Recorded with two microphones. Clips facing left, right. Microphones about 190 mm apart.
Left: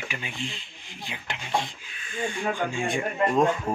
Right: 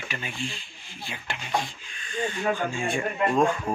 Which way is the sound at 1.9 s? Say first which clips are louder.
Right 2 dB; 5° left (ahead or behind).